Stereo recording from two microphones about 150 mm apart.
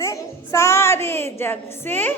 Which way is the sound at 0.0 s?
20° left (ahead or behind).